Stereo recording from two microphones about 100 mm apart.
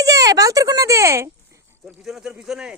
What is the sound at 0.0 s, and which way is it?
Speech, 35° right (ahead or behind).